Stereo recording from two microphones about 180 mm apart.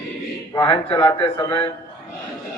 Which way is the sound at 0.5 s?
25° left (ahead or behind).